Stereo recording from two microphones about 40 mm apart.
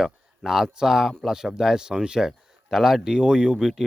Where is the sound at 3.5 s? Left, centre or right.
Centre.